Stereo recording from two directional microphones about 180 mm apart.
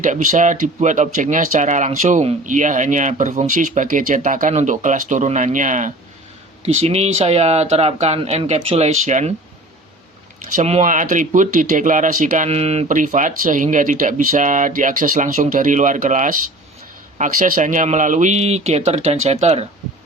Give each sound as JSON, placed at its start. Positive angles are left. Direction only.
{"t": 0.0, "sound": "speech", "side_deg": -45}
{"t": 10.5, "sound": "speech", "side_deg": -40}